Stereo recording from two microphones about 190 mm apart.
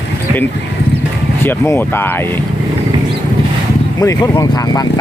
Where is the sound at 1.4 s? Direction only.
10° left (ahead or behind).